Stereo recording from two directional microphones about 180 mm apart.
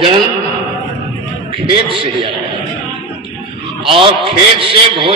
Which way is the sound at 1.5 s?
30° right (ahead or behind).